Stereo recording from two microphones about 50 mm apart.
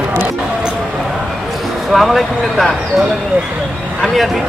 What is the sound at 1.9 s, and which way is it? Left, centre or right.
Speech, centre.